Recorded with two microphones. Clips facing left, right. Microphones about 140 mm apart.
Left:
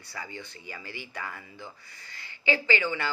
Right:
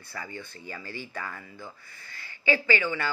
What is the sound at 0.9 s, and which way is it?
Speech, 15° left (ahead or behind).